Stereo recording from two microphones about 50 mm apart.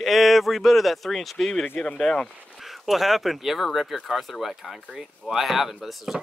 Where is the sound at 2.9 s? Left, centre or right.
Centre.